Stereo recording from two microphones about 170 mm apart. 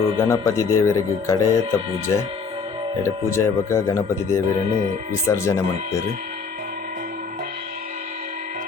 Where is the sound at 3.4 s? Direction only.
15° left (ahead or behind).